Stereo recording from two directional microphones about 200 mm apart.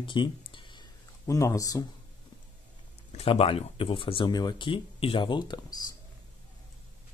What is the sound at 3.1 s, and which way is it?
Speech, 30° left (ahead or behind).